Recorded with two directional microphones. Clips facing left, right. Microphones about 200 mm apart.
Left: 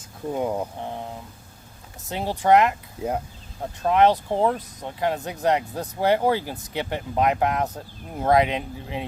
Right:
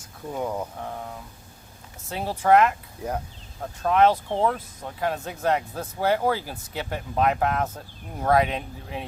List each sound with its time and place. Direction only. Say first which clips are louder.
0.3 s speech: left 4 dB; 20° left (ahead or behind)
2.0 s speech: left 1 dB; 15° left (ahead or behind)